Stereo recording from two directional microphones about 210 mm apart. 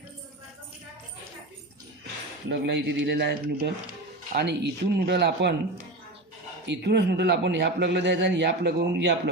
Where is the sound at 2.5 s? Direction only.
55° right (ahead or behind).